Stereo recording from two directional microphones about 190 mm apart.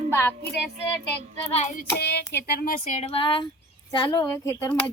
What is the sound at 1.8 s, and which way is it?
Speech, 55° left (ahead or behind).